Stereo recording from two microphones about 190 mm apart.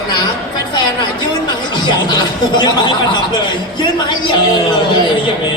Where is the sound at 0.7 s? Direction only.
20° left (ahead or behind).